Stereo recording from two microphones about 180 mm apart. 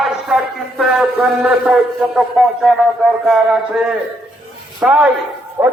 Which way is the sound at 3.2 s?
5° right (ahead or behind).